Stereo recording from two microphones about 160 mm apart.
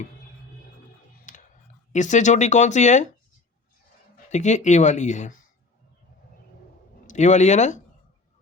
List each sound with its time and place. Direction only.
1.3 s a sound: 50° left (ahead or behind)
1.9 s speech: 50° left (ahead or behind)
4.3 s speech: 50° left (ahead or behind)
7.1 s speech: 50° left (ahead or behind)